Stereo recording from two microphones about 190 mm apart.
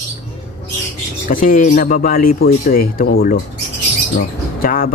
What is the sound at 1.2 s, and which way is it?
Speech, 45° left (ahead or behind).